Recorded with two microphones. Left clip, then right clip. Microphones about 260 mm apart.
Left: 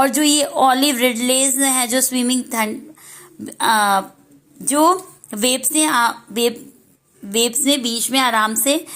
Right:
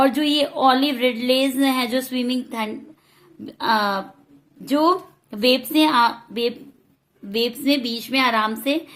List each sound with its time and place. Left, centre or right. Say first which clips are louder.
0.0 s a woman's voice: left 2 dB; centre